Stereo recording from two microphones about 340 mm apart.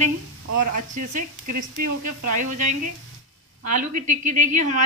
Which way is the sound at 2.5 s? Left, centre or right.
Right.